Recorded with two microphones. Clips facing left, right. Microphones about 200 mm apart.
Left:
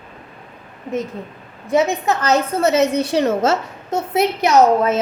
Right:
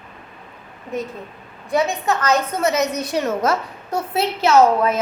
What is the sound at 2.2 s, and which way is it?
A woman's voice, 30° left (ahead or behind).